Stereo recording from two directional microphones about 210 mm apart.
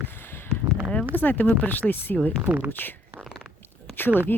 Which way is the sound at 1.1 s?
10° left (ahead or behind).